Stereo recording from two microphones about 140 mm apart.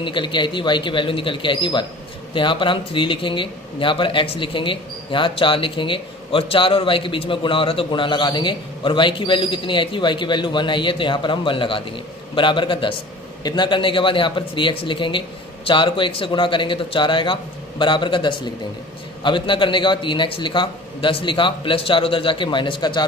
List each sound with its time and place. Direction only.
0.0 s speech: 35° left (ahead or behind)